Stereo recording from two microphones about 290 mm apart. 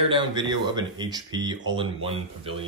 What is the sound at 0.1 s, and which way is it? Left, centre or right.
Speech, centre.